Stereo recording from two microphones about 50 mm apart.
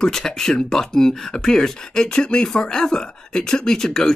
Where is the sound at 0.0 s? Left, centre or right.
Centre.